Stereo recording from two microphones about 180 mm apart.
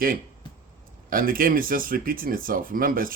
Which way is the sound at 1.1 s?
50° right (ahead or behind).